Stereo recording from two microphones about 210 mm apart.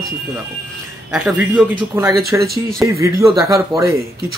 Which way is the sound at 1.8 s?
15° right (ahead or behind).